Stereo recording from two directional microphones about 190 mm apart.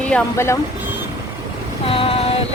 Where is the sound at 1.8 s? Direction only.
30° left (ahead or behind).